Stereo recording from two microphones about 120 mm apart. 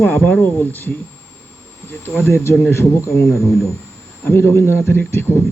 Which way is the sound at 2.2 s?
25° left (ahead or behind).